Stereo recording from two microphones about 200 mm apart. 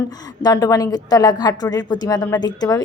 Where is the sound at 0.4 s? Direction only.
20° left (ahead or behind).